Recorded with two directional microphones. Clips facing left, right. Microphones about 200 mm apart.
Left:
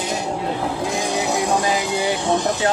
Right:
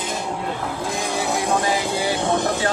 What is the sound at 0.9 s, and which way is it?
Vehicle, 20° left (ahead or behind).